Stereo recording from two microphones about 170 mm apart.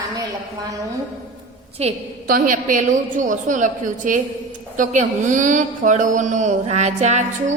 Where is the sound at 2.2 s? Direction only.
55° right (ahead or behind).